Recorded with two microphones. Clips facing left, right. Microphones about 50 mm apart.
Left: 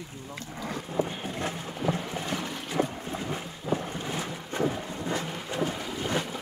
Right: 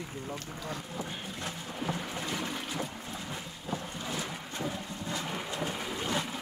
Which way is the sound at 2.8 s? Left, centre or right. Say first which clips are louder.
Left 8 dB; left.